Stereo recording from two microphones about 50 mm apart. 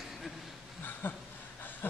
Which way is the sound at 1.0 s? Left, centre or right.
Left.